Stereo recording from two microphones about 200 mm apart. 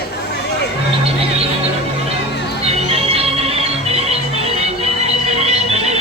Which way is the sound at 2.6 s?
30° right (ahead or behind).